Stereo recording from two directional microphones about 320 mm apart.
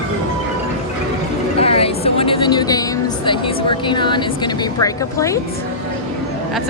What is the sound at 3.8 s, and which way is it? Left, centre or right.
Speech, centre.